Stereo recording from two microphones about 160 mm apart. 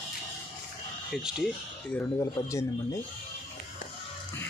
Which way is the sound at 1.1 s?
5° right (ahead or behind).